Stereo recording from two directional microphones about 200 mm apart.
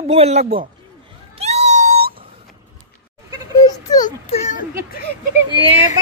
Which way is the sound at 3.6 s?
20° left (ahead or behind).